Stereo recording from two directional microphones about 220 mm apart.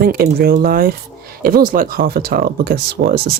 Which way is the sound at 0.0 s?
45° right (ahead or behind).